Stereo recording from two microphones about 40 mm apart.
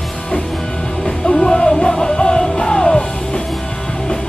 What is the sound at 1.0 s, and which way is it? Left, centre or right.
Music, left.